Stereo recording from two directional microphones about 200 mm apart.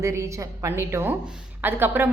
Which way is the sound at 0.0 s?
15° right (ahead or behind).